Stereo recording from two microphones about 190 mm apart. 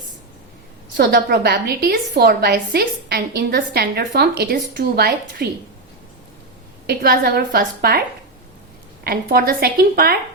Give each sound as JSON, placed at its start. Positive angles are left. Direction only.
{"t": 0.9, "sound": "a woman's voice", "side_deg": -60}
{"t": 6.8, "sound": "a woman's voice", "side_deg": -50}
{"t": 9.0, "sound": "a woman's voice", "side_deg": -50}